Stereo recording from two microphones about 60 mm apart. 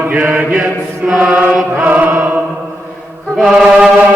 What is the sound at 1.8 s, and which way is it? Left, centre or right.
Chant, right.